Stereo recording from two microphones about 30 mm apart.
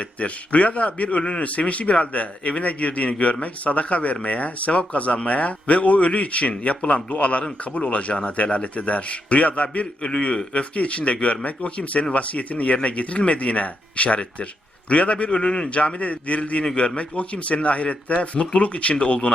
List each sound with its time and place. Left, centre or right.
0.0 s speech: left
1.2 s a man's voice: left
1.5 s speech: left
10.1 s a man's voice: left
16.0 s speech: left
16.7 s speech: left